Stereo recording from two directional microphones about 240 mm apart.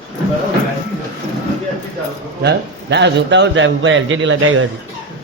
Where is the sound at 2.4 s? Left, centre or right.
Right.